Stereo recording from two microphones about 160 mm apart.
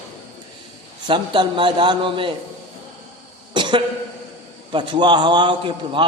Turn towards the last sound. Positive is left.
turn(degrees=-30)  # may be behind; listen again after turning